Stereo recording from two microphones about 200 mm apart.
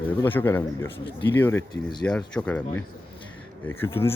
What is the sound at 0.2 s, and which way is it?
Speech, 10° left (ahead or behind).